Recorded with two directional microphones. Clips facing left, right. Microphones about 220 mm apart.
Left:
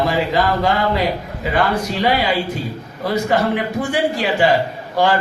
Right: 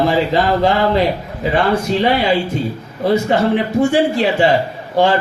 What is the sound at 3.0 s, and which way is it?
A man's voice, 25° right (ahead or behind).